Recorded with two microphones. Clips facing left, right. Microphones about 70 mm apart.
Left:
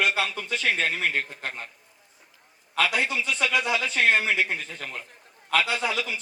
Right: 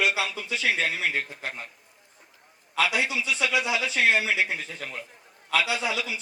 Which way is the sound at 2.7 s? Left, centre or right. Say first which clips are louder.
Even; left.